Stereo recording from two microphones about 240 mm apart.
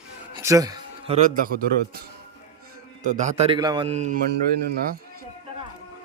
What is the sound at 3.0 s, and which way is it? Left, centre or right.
Speech, right.